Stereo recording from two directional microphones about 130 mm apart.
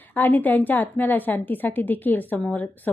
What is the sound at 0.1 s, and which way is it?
A woman's voice, 15° left (ahead or behind).